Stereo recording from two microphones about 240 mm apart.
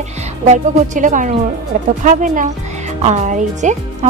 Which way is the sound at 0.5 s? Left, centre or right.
Right.